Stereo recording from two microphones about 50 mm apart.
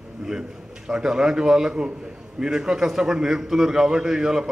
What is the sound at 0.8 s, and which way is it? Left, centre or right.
A man's voice, centre.